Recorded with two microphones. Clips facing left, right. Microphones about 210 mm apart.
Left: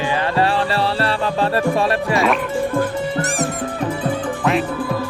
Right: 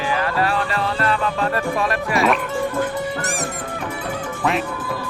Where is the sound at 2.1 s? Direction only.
Centre (ahead or behind).